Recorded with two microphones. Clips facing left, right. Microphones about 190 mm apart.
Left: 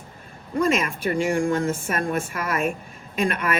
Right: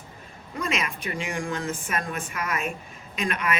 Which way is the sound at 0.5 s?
50° left (ahead or behind).